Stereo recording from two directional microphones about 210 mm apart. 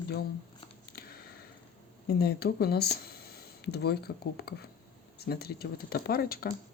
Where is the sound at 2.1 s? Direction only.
50° left (ahead or behind).